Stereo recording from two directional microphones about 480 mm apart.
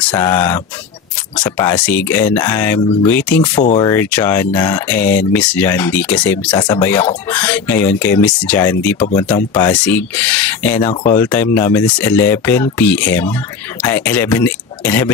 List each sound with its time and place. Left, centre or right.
0.0 s speech: centre